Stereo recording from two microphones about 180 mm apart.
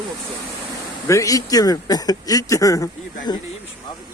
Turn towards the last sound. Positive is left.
turn(degrees=20)  # may be behind; listen again after turning